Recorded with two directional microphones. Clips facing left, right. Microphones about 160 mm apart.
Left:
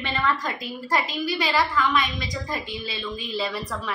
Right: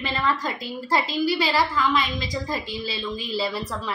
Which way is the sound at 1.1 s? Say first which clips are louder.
Right 2 dB; 30° right (ahead or behind).